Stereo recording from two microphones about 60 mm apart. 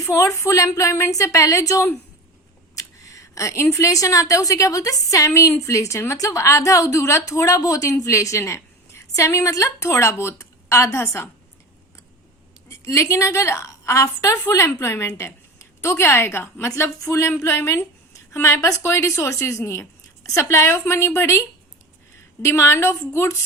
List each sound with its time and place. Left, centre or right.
0.0 s a woman's voice: left
8.4 s a woman's voice: left
12.6 s a woman's voice: left
16.6 s speech: left